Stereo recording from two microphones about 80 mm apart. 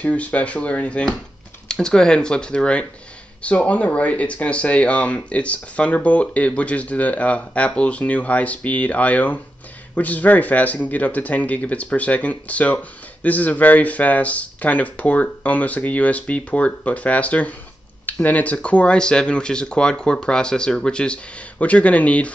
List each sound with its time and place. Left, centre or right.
0.0 s speech: centre